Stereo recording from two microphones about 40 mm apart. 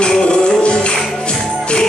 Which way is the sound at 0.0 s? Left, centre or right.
Left.